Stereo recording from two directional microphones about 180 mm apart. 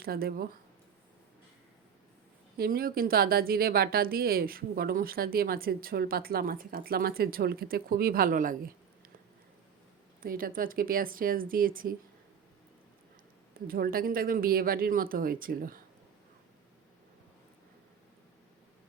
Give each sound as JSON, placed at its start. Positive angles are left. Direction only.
{"t": 0.0, "sound": "a woman's voice", "side_deg": -55}
{"t": 2.6, "sound": "a woman's voice", "side_deg": -55}
{"t": 10.2, "sound": "speech", "side_deg": -55}
{"t": 13.7, "sound": "speech", "side_deg": -55}